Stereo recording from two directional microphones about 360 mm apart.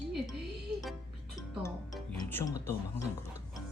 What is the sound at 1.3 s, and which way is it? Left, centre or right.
Speech, centre.